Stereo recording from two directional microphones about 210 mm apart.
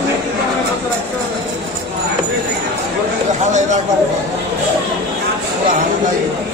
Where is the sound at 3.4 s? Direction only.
35° right (ahead or behind).